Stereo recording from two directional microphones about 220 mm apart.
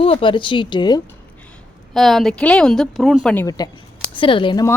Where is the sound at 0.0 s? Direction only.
25° left (ahead or behind).